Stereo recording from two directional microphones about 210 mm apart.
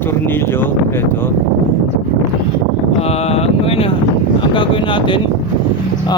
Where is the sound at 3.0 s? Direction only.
30° left (ahead or behind).